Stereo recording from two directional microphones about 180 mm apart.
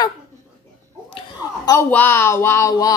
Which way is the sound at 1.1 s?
20° left (ahead or behind).